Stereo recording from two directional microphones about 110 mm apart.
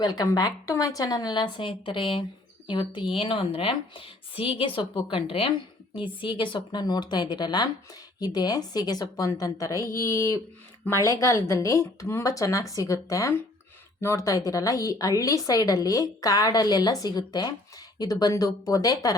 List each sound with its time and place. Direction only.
0.0 s a woman's voice: 35° left (ahead or behind)